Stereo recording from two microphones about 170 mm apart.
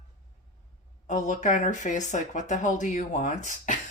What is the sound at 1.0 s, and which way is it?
Speech, 45° left (ahead or behind).